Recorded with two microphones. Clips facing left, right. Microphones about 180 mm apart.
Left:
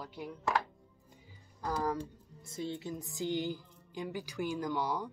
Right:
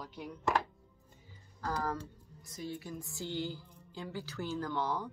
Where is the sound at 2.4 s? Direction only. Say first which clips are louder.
Left 3 dB; 25° left (ahead or behind).